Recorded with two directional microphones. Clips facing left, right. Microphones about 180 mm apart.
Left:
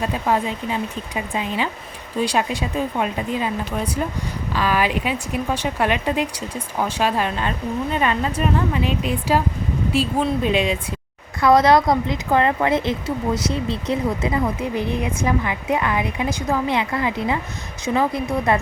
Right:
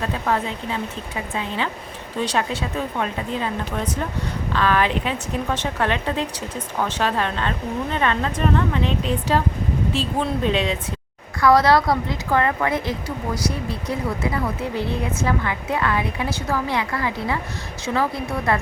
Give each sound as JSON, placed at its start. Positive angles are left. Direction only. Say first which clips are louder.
{"t": 0.0, "sound": "a woman's voice", "louder": "left 2 dB", "side_deg": 15}